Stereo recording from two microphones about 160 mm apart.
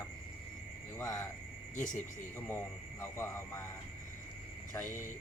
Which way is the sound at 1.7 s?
50° left (ahead or behind).